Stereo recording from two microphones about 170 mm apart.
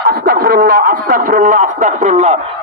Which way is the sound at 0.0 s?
60° right (ahead or behind).